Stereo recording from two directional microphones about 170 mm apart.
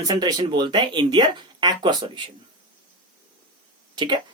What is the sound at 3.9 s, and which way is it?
Speech, 25° right (ahead or behind).